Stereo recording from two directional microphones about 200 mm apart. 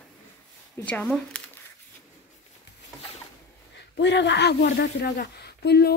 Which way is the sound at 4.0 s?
60° left (ahead or behind).